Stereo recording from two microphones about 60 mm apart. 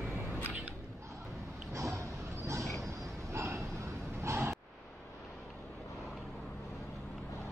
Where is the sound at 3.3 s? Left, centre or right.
Right.